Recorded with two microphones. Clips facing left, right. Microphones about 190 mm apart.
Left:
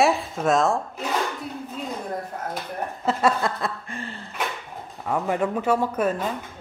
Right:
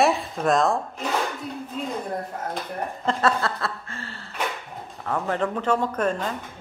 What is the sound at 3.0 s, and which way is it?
Speech, 15° left (ahead or behind).